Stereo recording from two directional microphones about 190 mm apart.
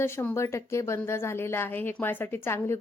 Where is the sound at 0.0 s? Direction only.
15° left (ahead or behind).